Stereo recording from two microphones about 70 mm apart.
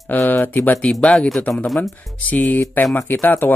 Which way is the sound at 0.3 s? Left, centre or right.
Left.